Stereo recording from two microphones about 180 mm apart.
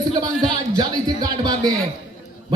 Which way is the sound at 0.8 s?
25° right (ahead or behind).